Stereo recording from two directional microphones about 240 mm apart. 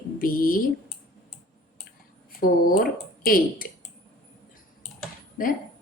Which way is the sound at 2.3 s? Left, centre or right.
Left.